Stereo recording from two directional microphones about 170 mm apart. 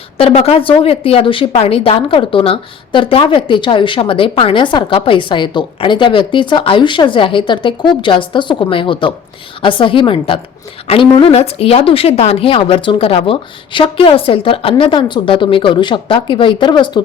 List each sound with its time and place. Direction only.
0.2 s speech: 35° left (ahead or behind)